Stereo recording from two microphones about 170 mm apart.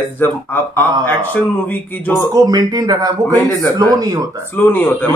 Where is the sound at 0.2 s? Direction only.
10° left (ahead or behind).